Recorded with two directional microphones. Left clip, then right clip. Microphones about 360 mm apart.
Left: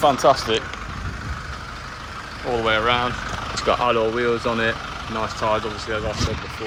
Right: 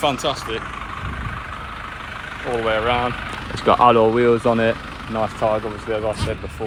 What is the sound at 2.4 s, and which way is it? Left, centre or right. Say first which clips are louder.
Speech: even; centre.